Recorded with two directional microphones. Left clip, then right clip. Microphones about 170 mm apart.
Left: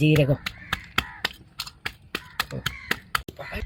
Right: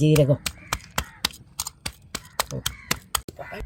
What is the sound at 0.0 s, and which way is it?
Speech, 50° right (ahead or behind).